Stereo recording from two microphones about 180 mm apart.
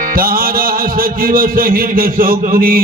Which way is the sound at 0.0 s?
50° right (ahead or behind).